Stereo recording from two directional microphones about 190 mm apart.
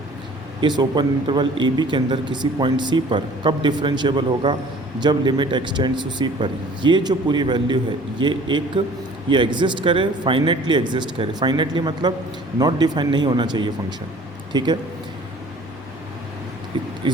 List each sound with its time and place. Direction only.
0.8 s a man's voice: 25° right (ahead or behind)
16.7 s speech: 25° right (ahead or behind)